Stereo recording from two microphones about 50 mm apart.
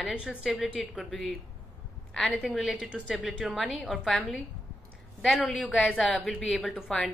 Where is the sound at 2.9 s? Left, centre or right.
Centre.